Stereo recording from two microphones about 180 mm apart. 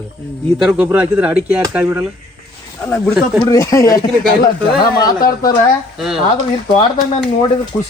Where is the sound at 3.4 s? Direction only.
20° left (ahead or behind).